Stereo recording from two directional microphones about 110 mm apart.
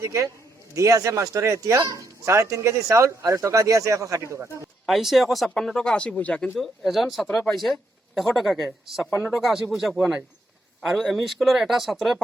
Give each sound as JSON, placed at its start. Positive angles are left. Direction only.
{"t": 0.0, "sound": "speech", "side_deg": -30}
{"t": 4.9, "sound": "speech", "side_deg": 0}
{"t": 6.6, "sound": "speech", "side_deg": 0}